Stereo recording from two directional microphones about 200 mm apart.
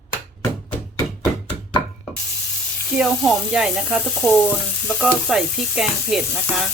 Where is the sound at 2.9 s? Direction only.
5° right (ahead or behind).